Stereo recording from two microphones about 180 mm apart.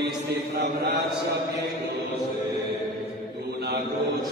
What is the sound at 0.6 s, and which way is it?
Speech, 70° right (ahead or behind).